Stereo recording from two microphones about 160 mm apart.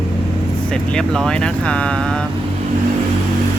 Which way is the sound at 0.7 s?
5° left (ahead or behind).